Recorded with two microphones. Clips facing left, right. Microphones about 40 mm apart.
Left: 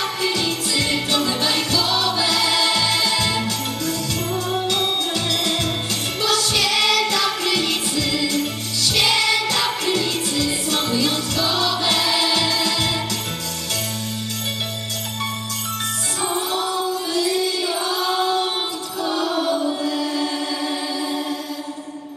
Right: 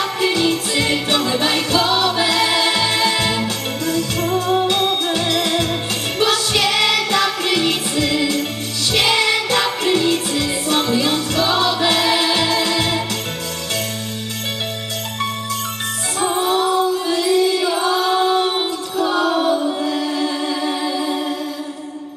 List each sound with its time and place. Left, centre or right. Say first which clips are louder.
0.0 s music: right 5 dB; right
16.4 s music: right 9 dB; right